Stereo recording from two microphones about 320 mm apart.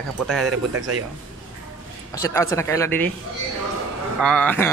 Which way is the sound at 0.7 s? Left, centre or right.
Right.